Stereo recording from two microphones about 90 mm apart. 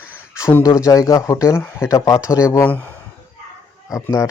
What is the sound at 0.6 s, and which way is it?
Speech, 35° left (ahead or behind).